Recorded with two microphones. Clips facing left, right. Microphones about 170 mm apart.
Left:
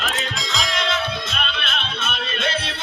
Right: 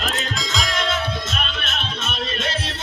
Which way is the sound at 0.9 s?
45° right (ahead or behind).